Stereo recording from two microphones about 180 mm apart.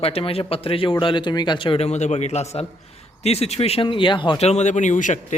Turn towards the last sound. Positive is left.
turn(degrees=45)  # may be behind; listen again after turning